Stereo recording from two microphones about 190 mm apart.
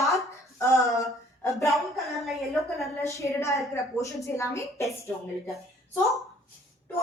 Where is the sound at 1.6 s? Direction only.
Centre (ahead or behind).